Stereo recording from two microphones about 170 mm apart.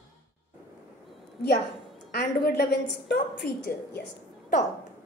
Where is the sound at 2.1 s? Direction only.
65° left (ahead or behind).